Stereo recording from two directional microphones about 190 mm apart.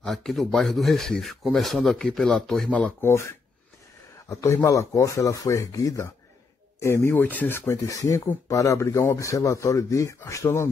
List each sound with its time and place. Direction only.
0.0 s speech: centre (ahead or behind)